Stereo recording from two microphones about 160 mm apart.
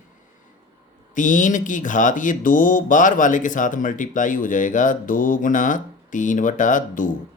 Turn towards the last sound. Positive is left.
turn(degrees=55)  # may be behind; listen again after turning